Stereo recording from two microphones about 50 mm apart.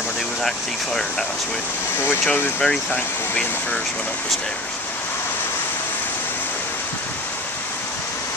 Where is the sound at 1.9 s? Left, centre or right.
Left.